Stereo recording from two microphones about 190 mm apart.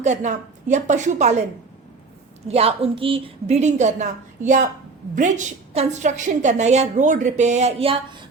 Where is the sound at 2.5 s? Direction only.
30° right (ahead or behind).